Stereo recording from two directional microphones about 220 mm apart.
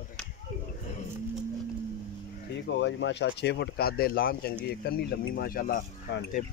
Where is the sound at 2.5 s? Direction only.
55° left (ahead or behind).